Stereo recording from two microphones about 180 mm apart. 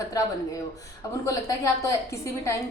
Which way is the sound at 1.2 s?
15° left (ahead or behind).